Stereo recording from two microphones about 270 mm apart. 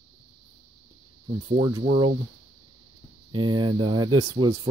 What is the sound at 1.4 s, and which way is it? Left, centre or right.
Speech, centre.